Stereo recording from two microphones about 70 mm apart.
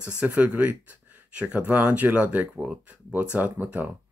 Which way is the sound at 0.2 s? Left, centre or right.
Centre.